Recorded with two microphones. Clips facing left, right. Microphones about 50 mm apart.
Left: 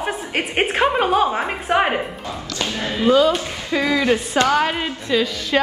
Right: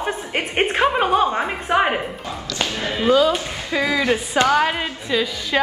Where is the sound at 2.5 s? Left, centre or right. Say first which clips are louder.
Right 1 dB; right.